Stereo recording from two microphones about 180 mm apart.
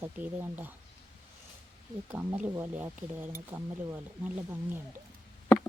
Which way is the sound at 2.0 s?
10° right (ahead or behind).